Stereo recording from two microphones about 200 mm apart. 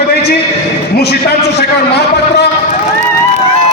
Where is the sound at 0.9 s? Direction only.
55° left (ahead or behind).